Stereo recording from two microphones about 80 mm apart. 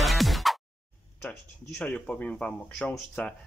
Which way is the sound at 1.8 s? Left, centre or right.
Centre.